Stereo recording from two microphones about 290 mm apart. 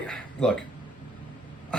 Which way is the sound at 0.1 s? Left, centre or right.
Centre.